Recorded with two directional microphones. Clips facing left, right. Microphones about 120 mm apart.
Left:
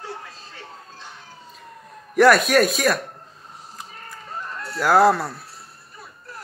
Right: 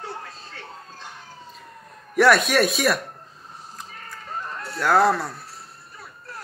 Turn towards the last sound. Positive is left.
turn(degrees=5)  # may be behind; listen again after turning